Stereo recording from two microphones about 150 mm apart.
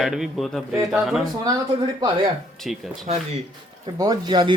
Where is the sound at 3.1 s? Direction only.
45° right (ahead or behind).